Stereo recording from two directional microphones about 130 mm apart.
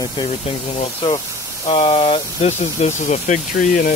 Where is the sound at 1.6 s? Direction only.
45° left (ahead or behind); by 3.9 s 90° left.